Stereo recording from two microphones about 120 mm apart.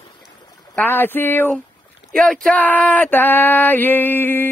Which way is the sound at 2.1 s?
5° left (ahead or behind).